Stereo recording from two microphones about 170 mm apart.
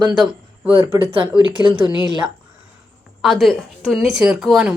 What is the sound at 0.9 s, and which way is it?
Speech, 30° right (ahead or behind).